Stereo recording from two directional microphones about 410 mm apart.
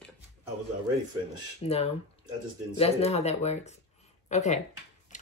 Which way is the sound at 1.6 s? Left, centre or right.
Centre.